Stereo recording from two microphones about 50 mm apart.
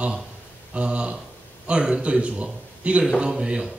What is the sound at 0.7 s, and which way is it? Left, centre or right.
A man's voice, right.